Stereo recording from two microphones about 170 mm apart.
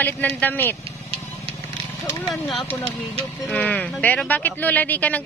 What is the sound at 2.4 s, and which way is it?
Speech, 10° left (ahead or behind).